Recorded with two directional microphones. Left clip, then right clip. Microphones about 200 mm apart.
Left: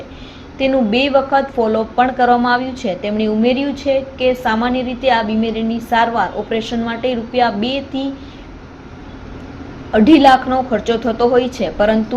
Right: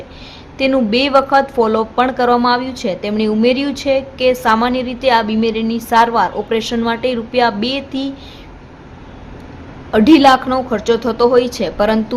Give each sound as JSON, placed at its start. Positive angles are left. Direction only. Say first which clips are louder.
{"t": 0.6, "sound": "a woman's voice", "louder": "right 1 dB", "side_deg": -25}
{"t": 9.9, "sound": "a woman's voice", "louder": "even", "side_deg": -25}